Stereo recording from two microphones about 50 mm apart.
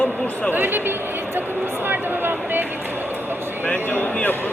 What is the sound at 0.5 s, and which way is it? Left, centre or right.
Speech, right.